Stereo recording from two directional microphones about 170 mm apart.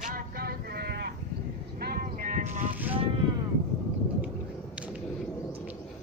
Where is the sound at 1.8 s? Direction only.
60° right (ahead or behind).